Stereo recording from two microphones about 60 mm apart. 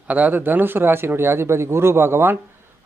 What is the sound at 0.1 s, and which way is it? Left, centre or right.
Speech, right.